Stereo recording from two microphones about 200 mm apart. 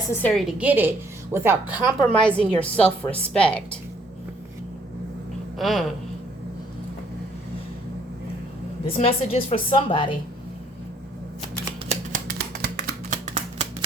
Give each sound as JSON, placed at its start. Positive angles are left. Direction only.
{"t": 0.1, "sound": "a woman's voice", "side_deg": 5}
{"t": 0.6, "sound": "a woman's voice", "side_deg": -10}
{"t": 2.0, "sound": "a woman's voice", "side_deg": 5}
{"t": 5.5, "sound": "a sound", "side_deg": 0}
{"t": 9.0, "sound": "a woman's voice", "side_deg": 30}
{"t": 11.9, "sound": "a sound", "side_deg": -45}